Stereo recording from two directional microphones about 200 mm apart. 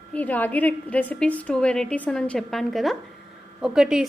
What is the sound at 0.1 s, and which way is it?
A woman's voice, 10° left (ahead or behind).